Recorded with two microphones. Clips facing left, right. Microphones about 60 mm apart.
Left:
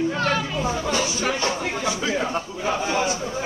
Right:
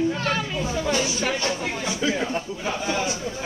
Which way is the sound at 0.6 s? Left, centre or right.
Left.